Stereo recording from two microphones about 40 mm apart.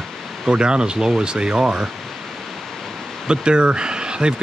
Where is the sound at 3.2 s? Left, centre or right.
Right.